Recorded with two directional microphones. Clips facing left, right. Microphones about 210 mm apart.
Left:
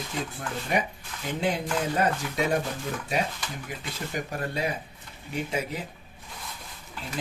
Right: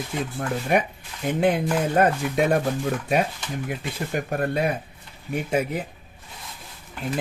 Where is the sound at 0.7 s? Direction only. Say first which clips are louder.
Right 5 dB; 55° right (ahead or behind).